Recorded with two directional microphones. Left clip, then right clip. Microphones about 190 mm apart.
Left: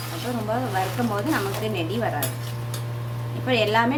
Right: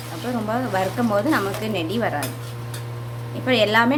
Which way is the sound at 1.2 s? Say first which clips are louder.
Right 3 dB; 40° right (ahead or behind).